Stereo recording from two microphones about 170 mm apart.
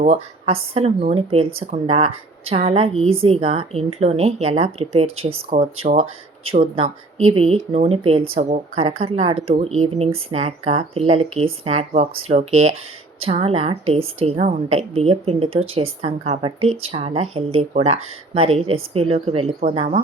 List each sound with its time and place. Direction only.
0.0 s a woman's voice: 35° right (ahead or behind)